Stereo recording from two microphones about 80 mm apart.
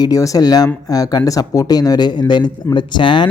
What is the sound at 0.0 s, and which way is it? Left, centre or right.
Speech, left.